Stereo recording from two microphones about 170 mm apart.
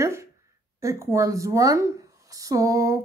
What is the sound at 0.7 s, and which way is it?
Speech, 20° right (ahead or behind).